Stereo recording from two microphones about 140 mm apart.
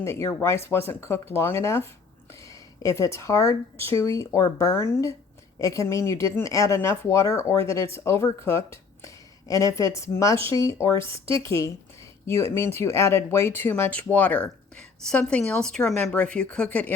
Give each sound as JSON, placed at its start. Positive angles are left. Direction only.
{"t": 0.0, "sound": "speech", "side_deg": 20}